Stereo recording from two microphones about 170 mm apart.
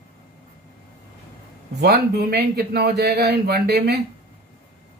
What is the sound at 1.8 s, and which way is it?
Speech, 70° right (ahead or behind).